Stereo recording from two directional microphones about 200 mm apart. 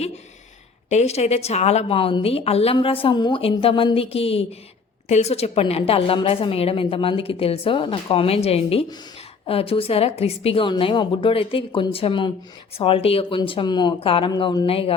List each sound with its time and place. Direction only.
0.9 s a woman's voice: 35° left (ahead or behind)